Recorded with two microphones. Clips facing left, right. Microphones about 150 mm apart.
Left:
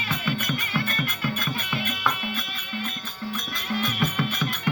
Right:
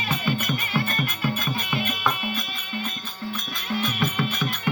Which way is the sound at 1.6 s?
10° right (ahead or behind).